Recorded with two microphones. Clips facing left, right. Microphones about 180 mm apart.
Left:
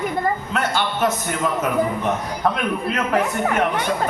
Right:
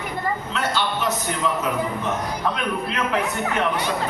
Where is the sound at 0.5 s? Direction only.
50° left (ahead or behind).